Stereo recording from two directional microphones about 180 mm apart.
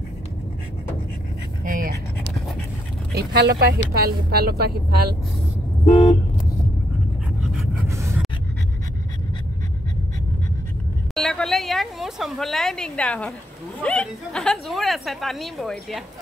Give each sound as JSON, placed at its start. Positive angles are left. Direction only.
{"t": 1.6, "sound": "dog", "side_deg": -50}
{"t": 3.2, "sound": "speech", "side_deg": -60}
{"t": 5.9, "sound": "vehicle", "side_deg": 15}
{"t": 11.1, "sound": "a sound", "side_deg": 0}
{"t": 13.8, "sound": "a woman's voice", "side_deg": 5}